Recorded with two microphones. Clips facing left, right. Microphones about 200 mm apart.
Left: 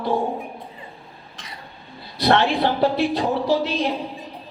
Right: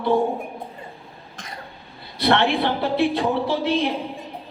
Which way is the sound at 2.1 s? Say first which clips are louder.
Left 1 dB; 60° right (ahead or behind).